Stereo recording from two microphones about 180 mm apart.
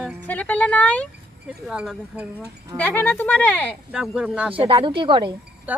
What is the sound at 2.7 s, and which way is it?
Speech, 10° left (ahead or behind).